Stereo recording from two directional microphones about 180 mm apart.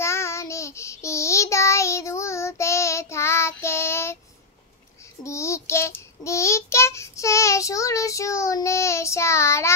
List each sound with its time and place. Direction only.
0.0 s child singing: 15° left (ahead or behind)
5.2 s child singing: 15° left (ahead or behind)